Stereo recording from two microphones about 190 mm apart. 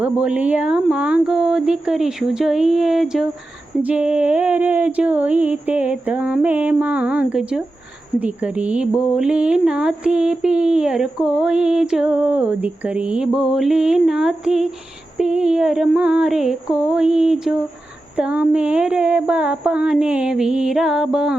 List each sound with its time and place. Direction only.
0.0 s speech: 5° right (ahead or behind)
3.8 s a sound: 5° right (ahead or behind)
8.2 s speech: 5° right (ahead or behind)